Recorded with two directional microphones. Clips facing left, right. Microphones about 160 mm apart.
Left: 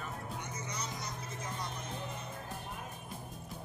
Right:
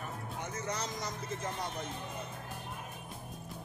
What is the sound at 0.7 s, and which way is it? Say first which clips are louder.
Speech: right 2 dB; 90° right.